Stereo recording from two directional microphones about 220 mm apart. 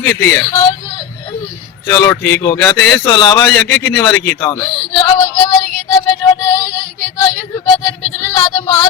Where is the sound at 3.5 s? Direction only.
50° left (ahead or behind).